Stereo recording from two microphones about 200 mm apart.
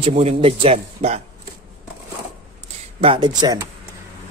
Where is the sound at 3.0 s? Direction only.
25° right (ahead or behind).